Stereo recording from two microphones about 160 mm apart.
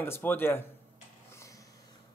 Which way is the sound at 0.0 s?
15° left (ahead or behind).